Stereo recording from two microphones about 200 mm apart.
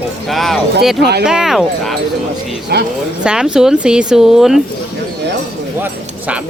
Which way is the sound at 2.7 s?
50° right (ahead or behind).